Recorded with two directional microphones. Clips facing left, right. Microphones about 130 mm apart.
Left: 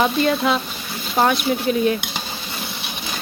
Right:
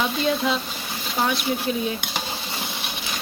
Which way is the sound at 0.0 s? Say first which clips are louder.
Left 5 dB; 60° left (ahead or behind).